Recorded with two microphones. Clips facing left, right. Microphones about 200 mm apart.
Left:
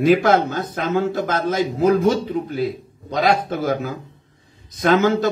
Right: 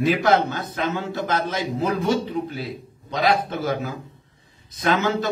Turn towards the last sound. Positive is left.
turn(degrees=50)  # may be behind; listen again after turning